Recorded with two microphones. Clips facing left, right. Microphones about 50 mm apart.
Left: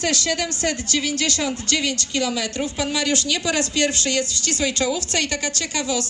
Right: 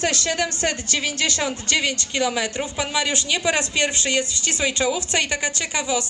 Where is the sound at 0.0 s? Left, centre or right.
Right.